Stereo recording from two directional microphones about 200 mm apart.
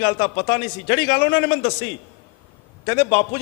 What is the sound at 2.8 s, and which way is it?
Speech, 15° left (ahead or behind).